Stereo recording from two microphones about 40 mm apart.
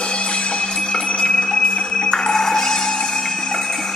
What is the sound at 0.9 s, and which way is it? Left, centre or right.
Music, centre.